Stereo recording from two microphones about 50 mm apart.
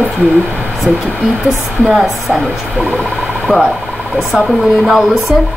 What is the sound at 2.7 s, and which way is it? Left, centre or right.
Speech, right.